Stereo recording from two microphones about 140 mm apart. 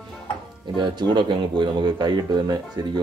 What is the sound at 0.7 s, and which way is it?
Speech, 30° right (ahead or behind).